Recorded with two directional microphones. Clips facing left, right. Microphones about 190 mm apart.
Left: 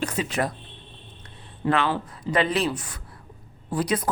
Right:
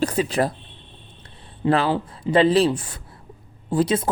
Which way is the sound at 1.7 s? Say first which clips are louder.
Right 4 dB; 35° right (ahead or behind).